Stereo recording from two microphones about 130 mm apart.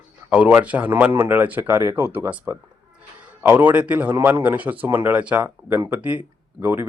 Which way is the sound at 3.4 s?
15° right (ahead or behind).